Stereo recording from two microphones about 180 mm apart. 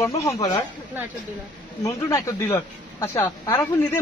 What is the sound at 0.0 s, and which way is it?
Speech, 15° left (ahead or behind).